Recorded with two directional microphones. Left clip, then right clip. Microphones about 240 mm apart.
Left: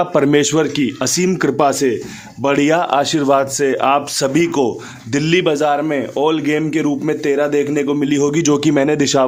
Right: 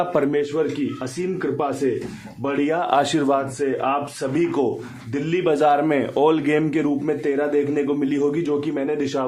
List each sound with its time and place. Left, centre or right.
0.0 s speech: left
0.3 s a man's voice: left
2.9 s speech: centre
3.6 s a man's voice: left
5.5 s a man's voice: centre
7.0 s a man's voice: left